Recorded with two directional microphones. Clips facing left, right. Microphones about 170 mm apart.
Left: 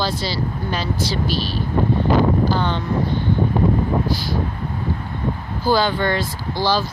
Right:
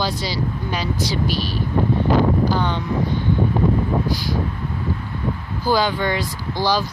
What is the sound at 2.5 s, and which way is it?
Speech, 10° right (ahead or behind).